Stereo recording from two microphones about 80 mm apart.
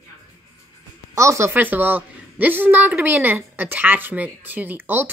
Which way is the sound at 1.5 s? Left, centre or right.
Right.